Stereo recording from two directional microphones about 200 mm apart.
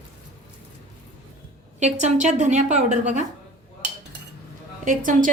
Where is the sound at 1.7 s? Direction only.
35° right (ahead or behind).